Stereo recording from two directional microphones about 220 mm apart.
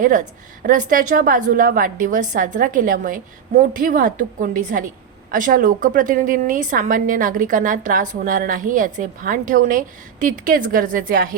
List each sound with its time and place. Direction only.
0.6 s a woman's voice: 35° right (ahead or behind)